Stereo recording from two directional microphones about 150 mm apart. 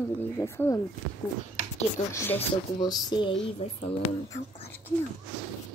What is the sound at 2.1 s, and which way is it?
Speech, 20° left (ahead or behind).